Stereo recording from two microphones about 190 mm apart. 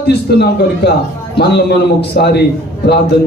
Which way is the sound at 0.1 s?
60° left (ahead or behind).